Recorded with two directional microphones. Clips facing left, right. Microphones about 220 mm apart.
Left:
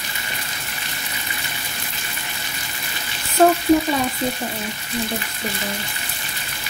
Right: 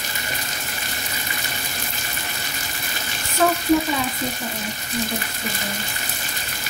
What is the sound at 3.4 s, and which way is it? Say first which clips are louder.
Frying: left 5 dB; 35° left (ahead or behind).